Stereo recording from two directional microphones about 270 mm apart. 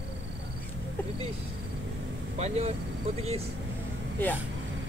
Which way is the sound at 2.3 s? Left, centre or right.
Right.